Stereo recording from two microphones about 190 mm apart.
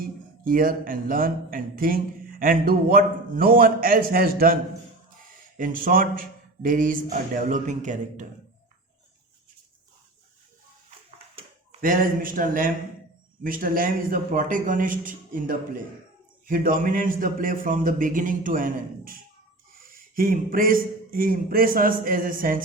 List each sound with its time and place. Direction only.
0.0 s speech: 50° right (ahead or behind)
5.5 s speech: 45° right (ahead or behind)
11.3 s speech: 40° right (ahead or behind)